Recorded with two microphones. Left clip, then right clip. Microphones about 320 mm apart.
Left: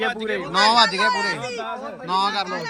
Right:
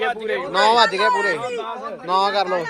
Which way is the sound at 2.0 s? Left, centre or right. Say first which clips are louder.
Right 3 dB; centre.